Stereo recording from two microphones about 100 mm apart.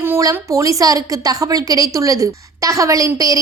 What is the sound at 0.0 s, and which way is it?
A woman's voice, 30° right (ahead or behind).